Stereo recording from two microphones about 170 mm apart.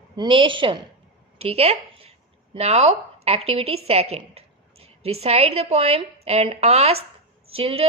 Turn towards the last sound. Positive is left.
turn(degrees=-35)  # may be behind; listen again after turning